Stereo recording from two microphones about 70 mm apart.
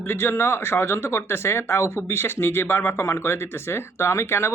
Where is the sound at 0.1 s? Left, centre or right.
Left.